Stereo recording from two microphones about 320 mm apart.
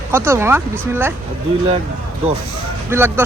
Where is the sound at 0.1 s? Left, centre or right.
Centre.